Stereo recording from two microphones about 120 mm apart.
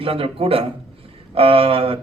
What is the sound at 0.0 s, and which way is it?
A man's voice, 50° right (ahead or behind).